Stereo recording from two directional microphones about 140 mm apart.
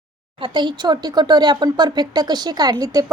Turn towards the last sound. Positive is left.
turn(degrees=-25)  # may be behind; listen again after turning